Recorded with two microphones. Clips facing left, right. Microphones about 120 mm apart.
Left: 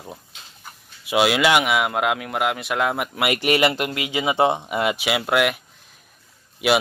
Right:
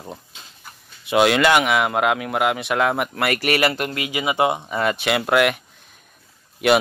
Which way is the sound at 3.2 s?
20° left (ahead or behind).